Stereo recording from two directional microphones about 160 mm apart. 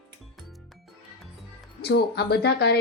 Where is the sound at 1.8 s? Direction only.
85° left.